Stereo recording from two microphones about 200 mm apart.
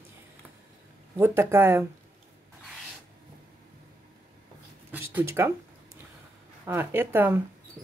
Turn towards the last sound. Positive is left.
turn(degrees=-10)  # may be behind; listen again after turning